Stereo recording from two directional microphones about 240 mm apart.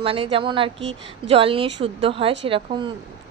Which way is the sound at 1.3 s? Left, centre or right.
Right.